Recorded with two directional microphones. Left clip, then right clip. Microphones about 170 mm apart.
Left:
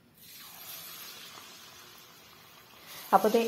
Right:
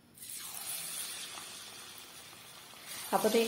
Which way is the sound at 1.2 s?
10° right (ahead or behind).